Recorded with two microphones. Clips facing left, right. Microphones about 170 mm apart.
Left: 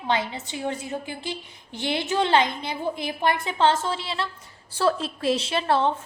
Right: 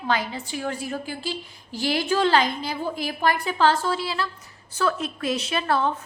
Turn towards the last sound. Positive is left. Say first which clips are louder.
# left 1 dB
turn(degrees=30)  # may be behind; listen again after turning